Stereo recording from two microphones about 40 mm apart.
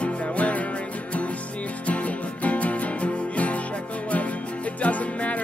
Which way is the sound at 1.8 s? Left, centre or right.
Left.